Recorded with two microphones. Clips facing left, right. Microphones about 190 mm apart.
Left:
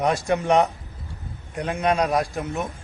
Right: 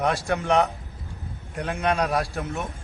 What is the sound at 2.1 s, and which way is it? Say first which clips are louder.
Speech: left 3 dB; 15° left (ahead or behind).